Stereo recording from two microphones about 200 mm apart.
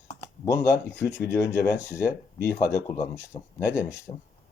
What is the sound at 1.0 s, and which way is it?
Speech, 60° left (ahead or behind).